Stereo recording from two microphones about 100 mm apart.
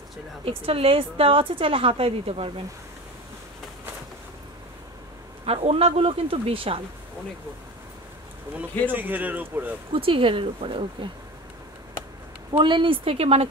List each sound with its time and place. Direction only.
0.5 s a woman's voice: 70° right (ahead or behind)
5.4 s speech: 75° right (ahead or behind)
8.8 s a man's voice: 20° right (ahead or behind)
9.9 s a woman's voice: 65° right (ahead or behind)
12.5 s speech: 55° right (ahead or behind); by 13.5 s 85° right